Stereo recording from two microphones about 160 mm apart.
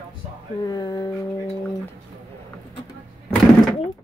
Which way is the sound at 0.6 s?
25° left (ahead or behind).